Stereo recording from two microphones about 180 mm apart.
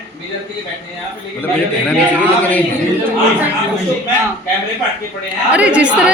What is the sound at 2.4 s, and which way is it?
Speech, 10° left (ahead or behind).